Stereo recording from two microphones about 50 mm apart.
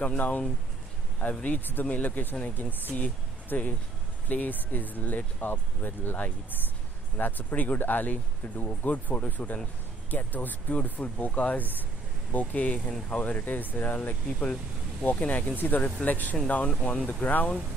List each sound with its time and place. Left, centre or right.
0.0 s speech: left
15.0 s speech: left